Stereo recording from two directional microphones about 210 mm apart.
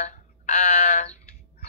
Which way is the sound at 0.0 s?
35° left (ahead or behind).